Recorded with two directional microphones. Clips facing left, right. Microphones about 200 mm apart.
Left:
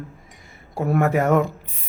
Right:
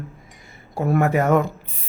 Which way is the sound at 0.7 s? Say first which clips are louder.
Right 1 dB; centre (ahead or behind).